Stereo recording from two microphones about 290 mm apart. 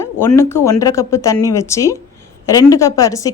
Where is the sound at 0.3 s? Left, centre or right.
Centre.